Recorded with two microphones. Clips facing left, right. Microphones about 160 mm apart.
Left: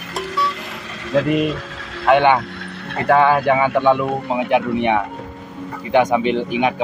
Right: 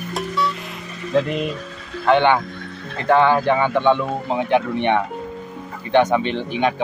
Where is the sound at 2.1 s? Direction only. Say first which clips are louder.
Left 2 dB; 15° left (ahead or behind).